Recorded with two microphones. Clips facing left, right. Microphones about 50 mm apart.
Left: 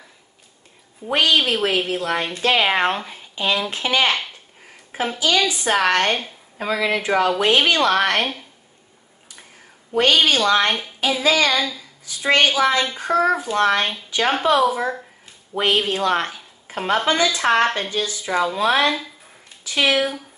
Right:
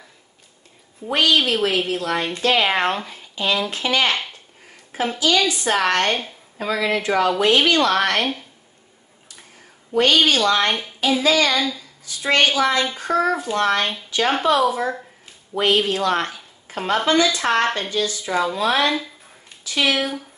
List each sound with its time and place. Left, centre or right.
1.1 s speech: left
3.3 s speech: left
4.9 s a sound: left
5.4 s speech: centre
9.9 s speech: left
11.5 s speech: centre
12.5 s speech: centre
15.5 s speech: left
20.0 s speech: centre